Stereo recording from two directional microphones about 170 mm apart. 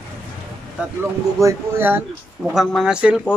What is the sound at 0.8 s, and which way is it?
Speech, 5° right (ahead or behind).